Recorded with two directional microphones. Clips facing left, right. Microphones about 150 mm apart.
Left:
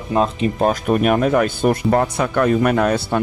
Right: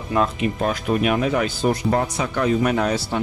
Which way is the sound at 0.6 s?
45° left (ahead or behind).